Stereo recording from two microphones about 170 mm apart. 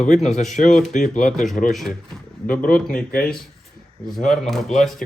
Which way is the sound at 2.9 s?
55° left (ahead or behind).